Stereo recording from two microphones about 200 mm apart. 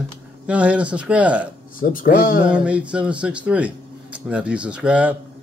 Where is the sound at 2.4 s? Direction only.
5° right (ahead or behind).